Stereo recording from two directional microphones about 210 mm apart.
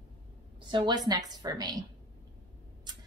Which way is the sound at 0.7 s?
20° right (ahead or behind).